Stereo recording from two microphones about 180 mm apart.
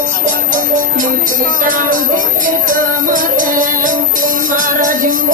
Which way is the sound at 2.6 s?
50° right (ahead or behind).